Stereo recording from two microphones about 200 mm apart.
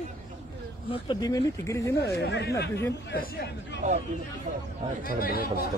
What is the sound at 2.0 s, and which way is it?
Speech, 55° left (ahead or behind).